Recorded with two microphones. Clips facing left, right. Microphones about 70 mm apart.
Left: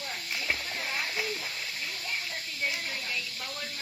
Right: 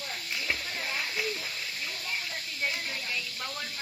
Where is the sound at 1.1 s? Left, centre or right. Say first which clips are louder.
Even; centre.